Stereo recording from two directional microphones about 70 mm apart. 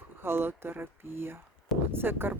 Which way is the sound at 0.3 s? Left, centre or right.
Right.